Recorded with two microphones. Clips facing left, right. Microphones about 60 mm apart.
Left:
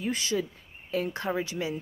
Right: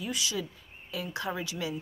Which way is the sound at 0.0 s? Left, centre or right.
Left.